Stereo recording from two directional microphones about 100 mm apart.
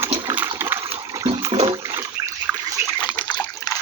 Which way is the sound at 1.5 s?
65° right (ahead or behind).